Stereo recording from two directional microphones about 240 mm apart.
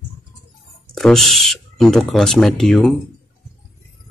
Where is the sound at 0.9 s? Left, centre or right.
Centre.